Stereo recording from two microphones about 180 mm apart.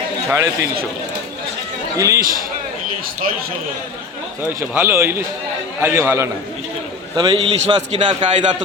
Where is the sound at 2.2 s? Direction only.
55° right (ahead or behind).